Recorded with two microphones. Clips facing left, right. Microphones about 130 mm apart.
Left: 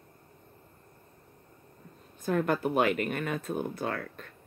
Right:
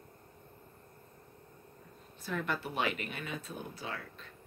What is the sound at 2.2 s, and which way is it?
Speech, 50° left (ahead or behind).